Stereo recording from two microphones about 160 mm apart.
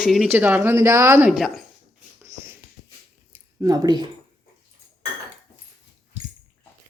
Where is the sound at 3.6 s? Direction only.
25° right (ahead or behind).